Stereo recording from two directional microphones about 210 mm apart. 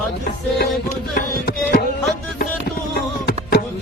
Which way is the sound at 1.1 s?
45° left (ahead or behind).